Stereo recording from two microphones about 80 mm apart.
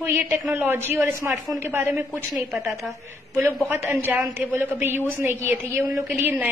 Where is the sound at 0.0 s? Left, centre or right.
Right.